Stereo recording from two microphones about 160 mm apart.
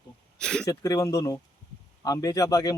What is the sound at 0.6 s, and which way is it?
Speech, 20° left (ahead or behind).